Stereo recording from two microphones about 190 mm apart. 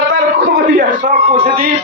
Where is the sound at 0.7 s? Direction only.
40° right (ahead or behind).